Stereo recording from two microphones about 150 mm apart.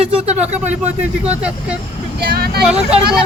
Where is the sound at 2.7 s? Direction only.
5° right (ahead or behind).